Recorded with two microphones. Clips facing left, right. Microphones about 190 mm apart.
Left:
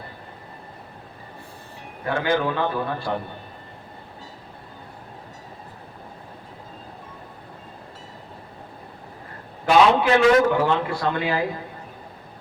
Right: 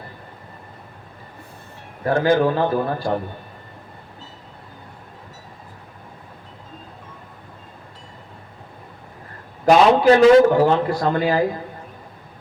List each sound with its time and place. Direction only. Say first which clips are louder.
2.0 s a man's voice: right 6 dB; 40° right (ahead or behind)
9.6 s a man's voice: right 4 dB; 40° right (ahead or behind)